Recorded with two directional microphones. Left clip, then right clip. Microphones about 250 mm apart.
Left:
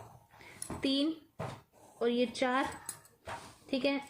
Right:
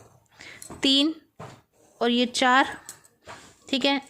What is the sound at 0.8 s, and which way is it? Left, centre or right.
Speech, right.